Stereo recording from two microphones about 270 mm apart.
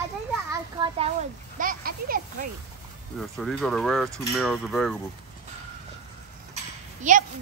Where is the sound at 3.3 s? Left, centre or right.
Centre.